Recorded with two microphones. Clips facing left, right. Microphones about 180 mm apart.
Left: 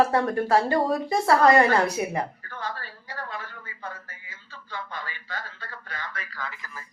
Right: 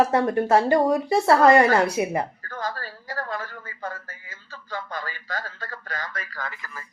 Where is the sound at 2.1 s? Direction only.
40° right (ahead or behind).